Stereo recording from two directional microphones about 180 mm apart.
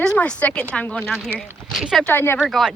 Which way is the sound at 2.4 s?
Centre (ahead or behind).